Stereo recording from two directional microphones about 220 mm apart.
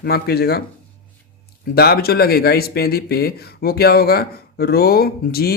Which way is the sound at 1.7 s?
45° left (ahead or behind).